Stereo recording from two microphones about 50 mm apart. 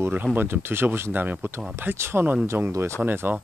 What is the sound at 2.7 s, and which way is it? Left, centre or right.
Speech, right.